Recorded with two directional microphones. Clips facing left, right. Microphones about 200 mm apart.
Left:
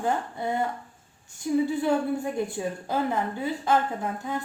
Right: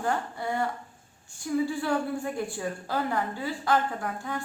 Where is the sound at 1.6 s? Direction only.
20° left (ahead or behind).